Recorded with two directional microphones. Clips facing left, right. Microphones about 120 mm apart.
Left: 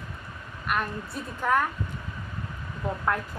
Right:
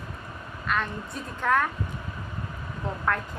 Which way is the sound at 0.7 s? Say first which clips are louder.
Even; 10° left (ahead or behind).